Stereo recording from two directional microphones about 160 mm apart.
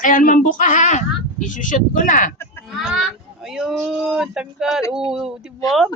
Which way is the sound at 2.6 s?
Centre (ahead or behind).